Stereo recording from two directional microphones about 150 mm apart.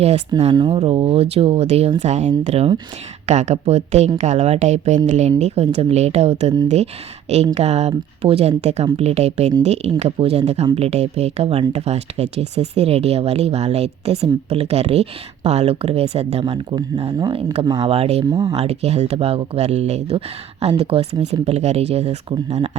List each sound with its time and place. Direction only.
0.5 s speech: 30° right (ahead or behind)
7.5 s speech: 45° right (ahead or behind)
17.2 s speech: 30° right (ahead or behind)
17.7 s speech: 40° right (ahead or behind)
18.5 s speech: 45° right (ahead or behind)